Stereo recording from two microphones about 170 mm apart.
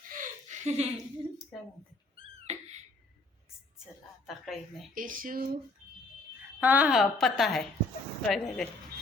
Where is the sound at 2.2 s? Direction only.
40° right (ahead or behind).